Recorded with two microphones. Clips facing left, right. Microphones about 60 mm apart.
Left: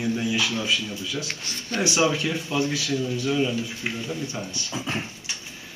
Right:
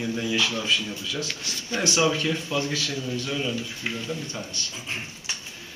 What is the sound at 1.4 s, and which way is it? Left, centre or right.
Speech, left.